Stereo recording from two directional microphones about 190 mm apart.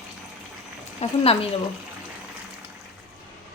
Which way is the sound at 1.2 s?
30° left (ahead or behind).